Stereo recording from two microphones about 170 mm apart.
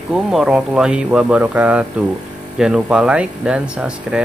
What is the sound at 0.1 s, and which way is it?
Speech, 5° right (ahead or behind).